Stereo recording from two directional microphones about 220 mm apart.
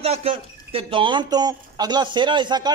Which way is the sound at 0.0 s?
25° right (ahead or behind).